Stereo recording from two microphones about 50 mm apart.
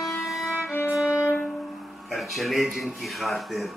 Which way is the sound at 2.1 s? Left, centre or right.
Centre.